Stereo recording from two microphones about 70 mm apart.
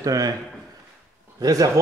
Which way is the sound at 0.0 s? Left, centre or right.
Right.